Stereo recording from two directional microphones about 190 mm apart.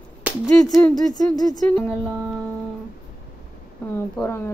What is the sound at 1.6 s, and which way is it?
Speech, 5° left (ahead or behind).